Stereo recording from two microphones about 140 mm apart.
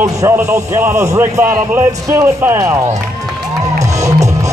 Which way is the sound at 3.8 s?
25° right (ahead or behind).